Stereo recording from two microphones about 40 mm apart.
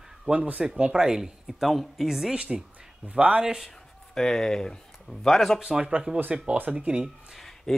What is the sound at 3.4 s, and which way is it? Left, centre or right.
Speech, centre.